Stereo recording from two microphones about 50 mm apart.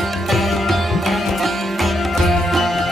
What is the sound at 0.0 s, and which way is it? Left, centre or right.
Sitar, centre.